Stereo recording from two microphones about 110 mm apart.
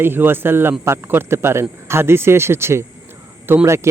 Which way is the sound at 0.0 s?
20° right (ahead or behind).